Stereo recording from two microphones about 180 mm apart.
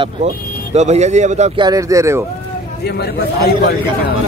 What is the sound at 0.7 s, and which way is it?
Speech, 40° right (ahead or behind).